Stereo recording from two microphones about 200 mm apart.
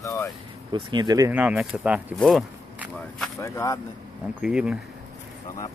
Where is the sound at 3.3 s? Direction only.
15° left (ahead or behind).